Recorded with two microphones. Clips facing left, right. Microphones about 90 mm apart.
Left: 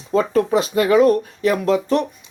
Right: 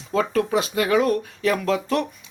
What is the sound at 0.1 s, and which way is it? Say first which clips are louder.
Speech: left 4 dB; 40° left (ahead or behind).